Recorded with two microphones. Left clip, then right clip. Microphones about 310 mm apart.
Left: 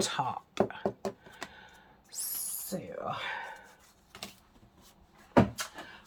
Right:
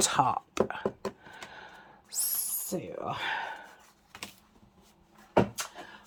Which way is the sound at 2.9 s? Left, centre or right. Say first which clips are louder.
Right 3 dB; right.